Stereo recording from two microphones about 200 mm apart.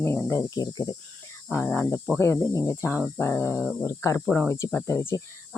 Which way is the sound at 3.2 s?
10° left (ahead or behind).